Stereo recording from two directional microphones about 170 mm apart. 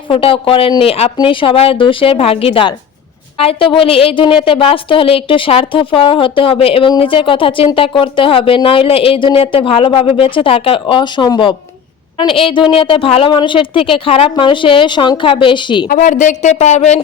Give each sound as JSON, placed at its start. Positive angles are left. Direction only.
{"t": 0.1, "sound": "a woman's voice", "side_deg": 35}
{"t": 15.9, "sound": "speech", "side_deg": 50}